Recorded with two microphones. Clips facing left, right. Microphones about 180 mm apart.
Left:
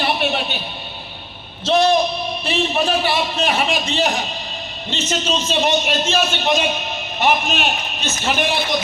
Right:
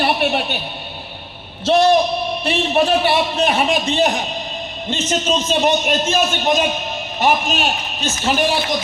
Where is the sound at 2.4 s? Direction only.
60° right (ahead or behind).